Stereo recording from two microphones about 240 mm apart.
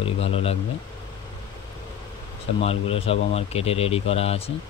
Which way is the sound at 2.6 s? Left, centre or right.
Left.